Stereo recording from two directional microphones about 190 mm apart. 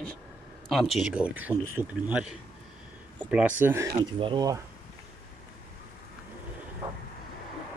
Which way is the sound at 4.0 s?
25° right (ahead or behind).